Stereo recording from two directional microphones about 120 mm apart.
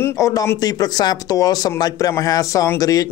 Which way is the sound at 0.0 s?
30° left (ahead or behind).